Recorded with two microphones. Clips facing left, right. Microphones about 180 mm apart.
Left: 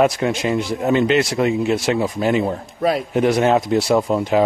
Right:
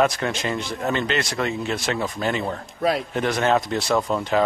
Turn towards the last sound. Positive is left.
turn(degrees=15)  # may be behind; listen again after turning